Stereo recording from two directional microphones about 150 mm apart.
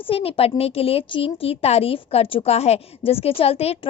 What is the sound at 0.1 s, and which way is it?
A woman's voice, 40° left (ahead or behind).